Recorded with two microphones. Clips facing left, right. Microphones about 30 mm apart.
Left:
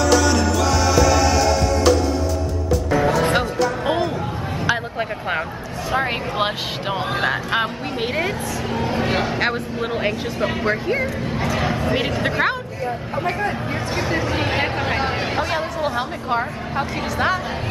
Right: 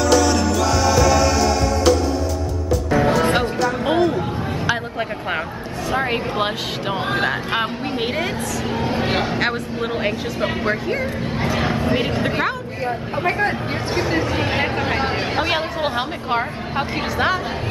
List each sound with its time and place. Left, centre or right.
0.1 s music: centre
3.1 s music: centre
3.3 s a sound: centre
5.9 s speech: centre
13.9 s speech: centre
15.3 s speech: right